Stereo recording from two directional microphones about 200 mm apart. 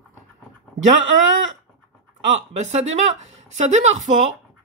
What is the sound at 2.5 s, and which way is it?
Speech, 35° right (ahead or behind).